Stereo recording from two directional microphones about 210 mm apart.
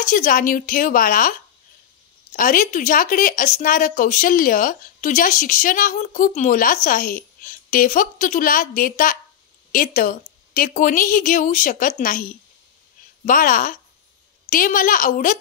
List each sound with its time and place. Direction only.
0.0 s speech: 40° left (ahead or behind)
2.3 s speech: 40° left (ahead or behind)